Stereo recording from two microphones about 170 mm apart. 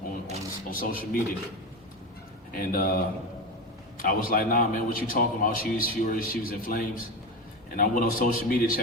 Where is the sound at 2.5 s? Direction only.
60° left (ahead or behind).